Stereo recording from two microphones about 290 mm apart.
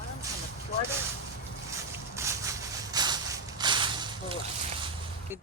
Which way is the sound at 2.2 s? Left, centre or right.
Centre.